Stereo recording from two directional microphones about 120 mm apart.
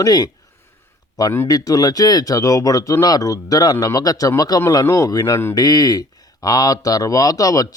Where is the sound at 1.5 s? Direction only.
30° left (ahead or behind).